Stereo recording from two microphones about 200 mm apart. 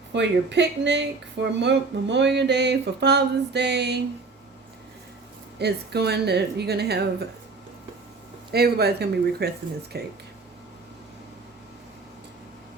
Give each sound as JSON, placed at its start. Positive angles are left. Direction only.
{"t": 0.1, "sound": "speech", "side_deg": -60}
{"t": 5.5, "sound": "speech", "side_deg": -55}
{"t": 8.5, "sound": "speech", "side_deg": -55}